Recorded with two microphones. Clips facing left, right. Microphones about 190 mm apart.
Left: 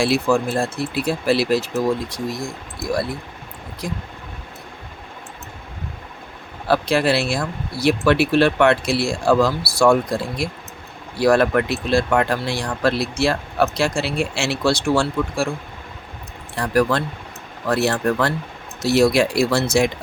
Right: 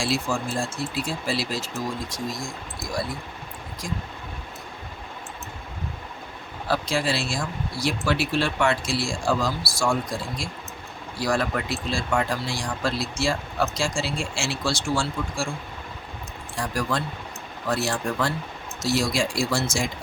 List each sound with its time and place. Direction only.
0.0 s speech: 60° left (ahead or behind)
6.7 s speech: 65° left (ahead or behind)
16.6 s speech: 65° left (ahead or behind)